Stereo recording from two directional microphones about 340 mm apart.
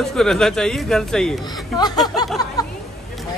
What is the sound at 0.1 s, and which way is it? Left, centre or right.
Speech, centre.